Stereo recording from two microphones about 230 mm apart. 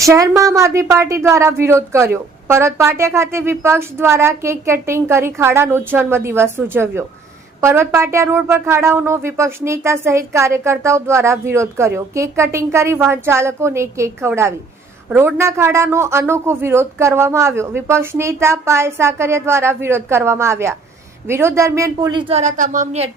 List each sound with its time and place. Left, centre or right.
0.0 s speech: centre; by 23.0 s right